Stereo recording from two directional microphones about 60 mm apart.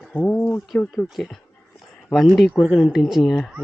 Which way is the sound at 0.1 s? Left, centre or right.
Left.